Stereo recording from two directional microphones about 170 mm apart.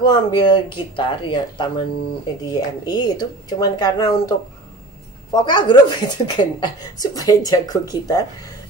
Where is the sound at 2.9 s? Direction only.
25° left (ahead or behind).